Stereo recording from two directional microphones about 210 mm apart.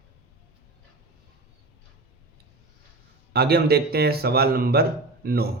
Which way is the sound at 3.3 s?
50° right (ahead or behind).